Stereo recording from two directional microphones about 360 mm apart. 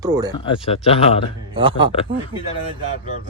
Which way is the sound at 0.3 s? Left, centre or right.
Centre.